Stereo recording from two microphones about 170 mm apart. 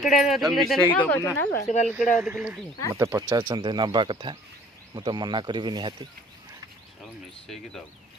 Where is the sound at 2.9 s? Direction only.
15° right (ahead or behind).